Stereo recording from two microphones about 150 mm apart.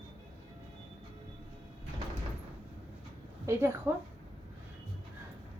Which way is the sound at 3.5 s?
20° right (ahead or behind).